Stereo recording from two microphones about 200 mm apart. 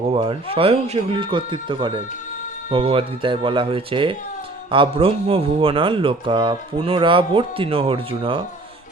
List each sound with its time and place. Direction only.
0.1 s speech: 30° right (ahead or behind)